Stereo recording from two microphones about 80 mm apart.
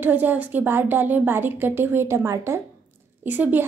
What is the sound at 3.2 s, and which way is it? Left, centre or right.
Speech, right.